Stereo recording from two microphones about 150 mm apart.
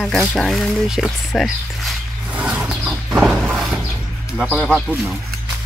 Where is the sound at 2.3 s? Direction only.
10° right (ahead or behind).